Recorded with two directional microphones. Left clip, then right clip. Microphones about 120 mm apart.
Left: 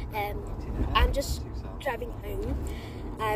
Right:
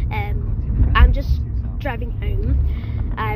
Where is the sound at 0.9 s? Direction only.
20° left (ahead or behind).